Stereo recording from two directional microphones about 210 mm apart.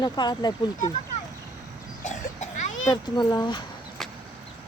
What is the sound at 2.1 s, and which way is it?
Cough, 35° left (ahead or behind).